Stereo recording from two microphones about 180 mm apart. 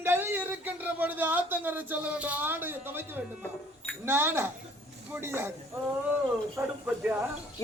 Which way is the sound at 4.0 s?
10° right (ahead or behind).